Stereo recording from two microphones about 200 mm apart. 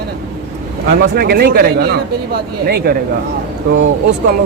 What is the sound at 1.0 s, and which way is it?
Speech, 50° right (ahead or behind).